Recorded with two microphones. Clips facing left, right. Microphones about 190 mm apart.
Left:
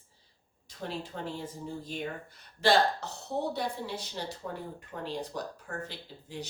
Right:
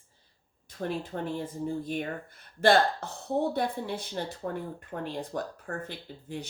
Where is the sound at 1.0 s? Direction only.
55° right (ahead or behind).